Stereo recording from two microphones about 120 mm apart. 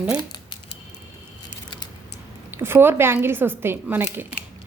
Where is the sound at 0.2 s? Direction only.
35° left (ahead or behind).